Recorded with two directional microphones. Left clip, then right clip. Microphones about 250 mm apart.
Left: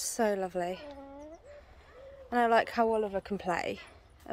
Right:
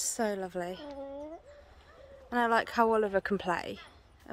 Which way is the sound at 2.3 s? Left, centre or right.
Centre.